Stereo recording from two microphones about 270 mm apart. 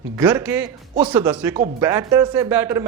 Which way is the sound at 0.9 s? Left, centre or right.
Centre.